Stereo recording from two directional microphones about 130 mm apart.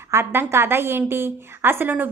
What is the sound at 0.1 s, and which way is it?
A woman's voice, 20° right (ahead or behind).